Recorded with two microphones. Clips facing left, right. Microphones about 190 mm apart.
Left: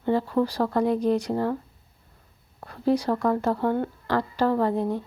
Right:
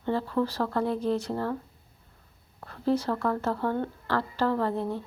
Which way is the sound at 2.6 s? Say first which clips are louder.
Left 3 dB; 15° left (ahead or behind).